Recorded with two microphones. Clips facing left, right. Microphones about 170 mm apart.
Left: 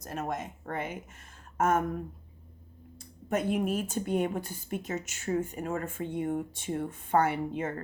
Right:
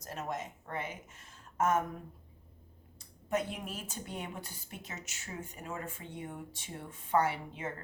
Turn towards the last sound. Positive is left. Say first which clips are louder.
# left 6 dB
turn(degrees=55)  # may be behind; listen again after turning